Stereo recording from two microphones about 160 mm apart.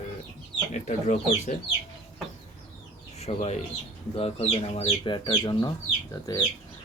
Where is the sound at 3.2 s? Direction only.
40° left (ahead or behind); by 5.7 s 25° left (ahead or behind).